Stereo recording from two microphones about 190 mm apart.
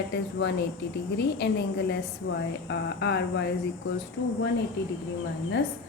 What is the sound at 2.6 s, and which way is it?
Speech, 65° left (ahead or behind).